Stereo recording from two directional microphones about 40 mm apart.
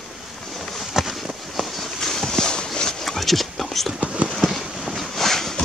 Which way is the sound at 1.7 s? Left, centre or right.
Centre.